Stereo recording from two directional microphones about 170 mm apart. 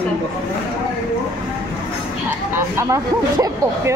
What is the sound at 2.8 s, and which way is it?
Speech, 20° right (ahead or behind).